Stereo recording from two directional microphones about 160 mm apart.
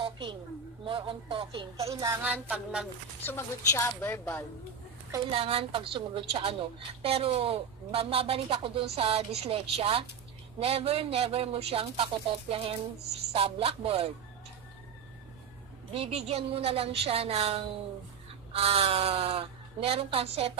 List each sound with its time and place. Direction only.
0.0 s a sound: 30° right (ahead or behind)
0.8 s speech: 35° right (ahead or behind)
2.2 s music: 10° right (ahead or behind)
3.3 s a woman's voice: 15° left (ahead or behind)
5.3 s speech: 35° right (ahead or behind)
15.9 s speech: 40° right (ahead or behind)